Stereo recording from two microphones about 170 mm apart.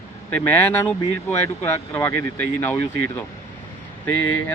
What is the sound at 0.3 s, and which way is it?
Speech, 10° left (ahead or behind).